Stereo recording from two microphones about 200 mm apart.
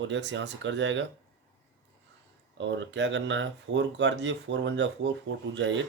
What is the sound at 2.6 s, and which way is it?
Speech, 65° right (ahead or behind).